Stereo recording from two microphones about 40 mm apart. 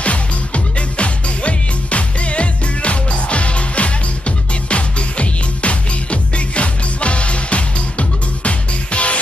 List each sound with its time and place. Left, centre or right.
0.7 s music: left